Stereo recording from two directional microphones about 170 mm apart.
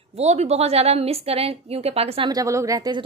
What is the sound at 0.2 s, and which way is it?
A woman's voice, 40° right (ahead or behind).